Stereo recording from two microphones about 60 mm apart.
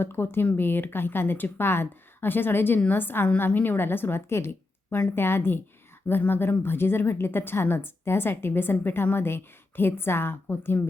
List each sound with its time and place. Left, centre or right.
0.0 s a woman's voice: left